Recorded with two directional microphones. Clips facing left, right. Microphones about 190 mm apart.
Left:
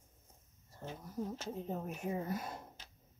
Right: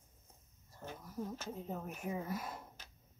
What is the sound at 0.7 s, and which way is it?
Speech, 30° left (ahead or behind).